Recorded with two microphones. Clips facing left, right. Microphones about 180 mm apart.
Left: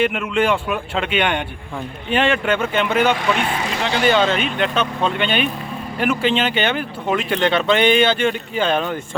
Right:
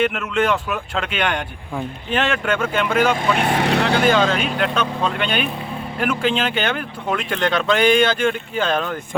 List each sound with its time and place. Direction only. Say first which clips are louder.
0.0 s speech: left 1 dB; 5° left (ahead or behind)
3.5 s speech: right 4 dB; 65° right (ahead or behind)
4.0 s speech: left 4 dB; 5° left (ahead or behind)
4.4 s speech: left 1 dB; 5° right (ahead or behind)